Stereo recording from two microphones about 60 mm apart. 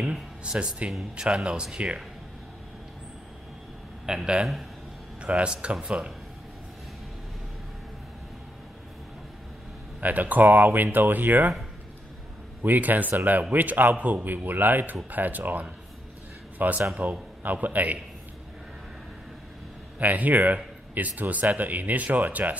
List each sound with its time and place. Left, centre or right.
0.0 s a sound: centre
1.1 s speech: centre
4.0 s speech: centre
9.9 s a man's voice: right
12.6 s a man's voice: right
20.0 s speech: right